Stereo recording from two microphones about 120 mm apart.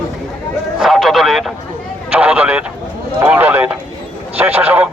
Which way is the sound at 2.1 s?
10° right (ahead or behind).